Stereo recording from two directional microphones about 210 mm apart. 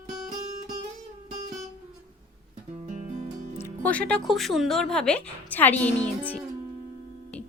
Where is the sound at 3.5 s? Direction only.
10° left (ahead or behind).